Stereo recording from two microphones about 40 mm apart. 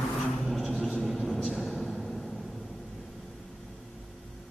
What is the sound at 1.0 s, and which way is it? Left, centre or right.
Vehicle, centre.